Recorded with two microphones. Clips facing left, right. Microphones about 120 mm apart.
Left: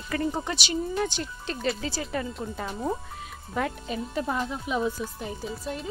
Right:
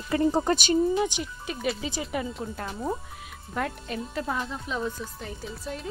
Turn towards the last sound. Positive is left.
turn(degrees=0)  # may be behind; listen again after turning